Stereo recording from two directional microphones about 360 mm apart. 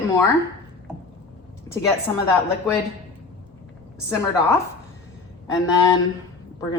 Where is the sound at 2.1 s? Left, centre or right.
Centre.